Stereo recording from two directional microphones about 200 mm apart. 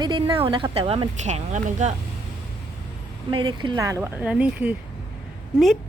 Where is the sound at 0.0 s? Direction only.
25° right (ahead or behind).